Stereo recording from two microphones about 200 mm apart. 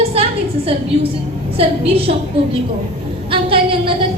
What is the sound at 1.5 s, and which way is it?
Speech, 30° right (ahead or behind).